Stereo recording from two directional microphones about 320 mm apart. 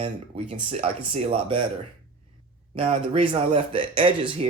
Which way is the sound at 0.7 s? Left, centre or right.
Centre.